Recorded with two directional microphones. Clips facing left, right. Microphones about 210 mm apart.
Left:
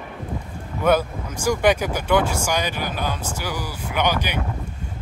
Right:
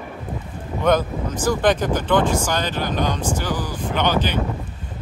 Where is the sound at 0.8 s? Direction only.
10° left (ahead or behind).